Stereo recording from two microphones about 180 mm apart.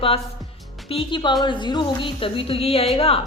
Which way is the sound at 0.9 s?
30° left (ahead or behind).